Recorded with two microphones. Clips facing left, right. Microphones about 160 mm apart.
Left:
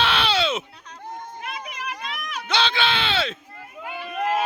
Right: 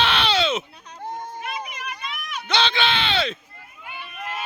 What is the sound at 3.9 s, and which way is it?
Run, 90° left.